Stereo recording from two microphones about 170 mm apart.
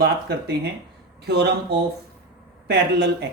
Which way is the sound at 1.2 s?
75° right (ahead or behind).